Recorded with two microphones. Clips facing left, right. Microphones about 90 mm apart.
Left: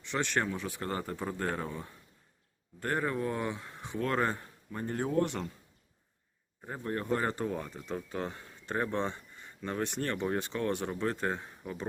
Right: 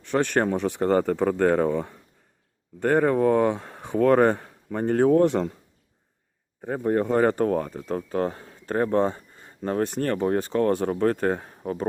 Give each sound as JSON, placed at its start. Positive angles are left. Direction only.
{"t": 0.0, "sound": "speech", "side_deg": -45}
{"t": 2.8, "sound": "speech", "side_deg": -70}
{"t": 3.9, "sound": "speech", "side_deg": -80}
{"t": 6.7, "sound": "speech", "side_deg": -75}